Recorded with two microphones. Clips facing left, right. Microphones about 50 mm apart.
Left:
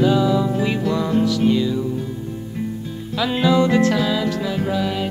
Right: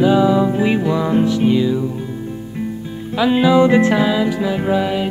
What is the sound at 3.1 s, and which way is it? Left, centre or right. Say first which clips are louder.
Music: right 5 dB; centre.